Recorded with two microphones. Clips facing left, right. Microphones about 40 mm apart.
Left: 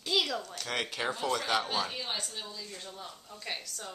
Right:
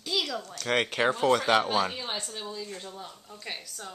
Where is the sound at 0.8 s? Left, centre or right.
Right.